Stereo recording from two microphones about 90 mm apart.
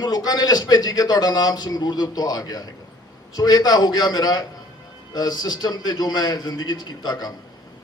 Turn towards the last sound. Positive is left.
turn(degrees=50)  # may be behind; listen again after turning